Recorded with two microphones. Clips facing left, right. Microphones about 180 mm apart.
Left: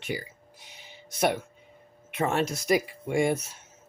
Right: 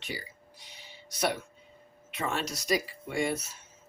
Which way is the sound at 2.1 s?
50° left (ahead or behind).